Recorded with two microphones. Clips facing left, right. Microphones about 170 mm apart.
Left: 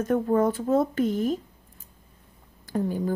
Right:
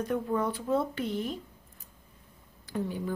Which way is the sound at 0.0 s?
45° left (ahead or behind).